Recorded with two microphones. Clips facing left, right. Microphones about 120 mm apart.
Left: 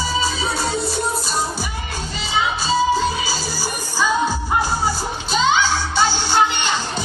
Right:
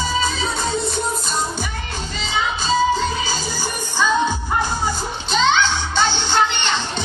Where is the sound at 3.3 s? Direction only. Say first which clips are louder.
Even; 10° left (ahead or behind).